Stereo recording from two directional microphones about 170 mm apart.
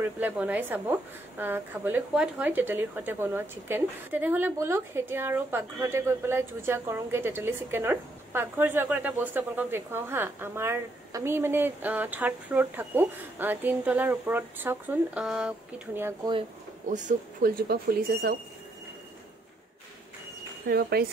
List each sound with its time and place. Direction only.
0.0 s speech: 10° right (ahead or behind)
16.9 s speech: 45° right (ahead or behind)
17.6 s speech: 65° right (ahead or behind)
20.6 s speech: 65° right (ahead or behind)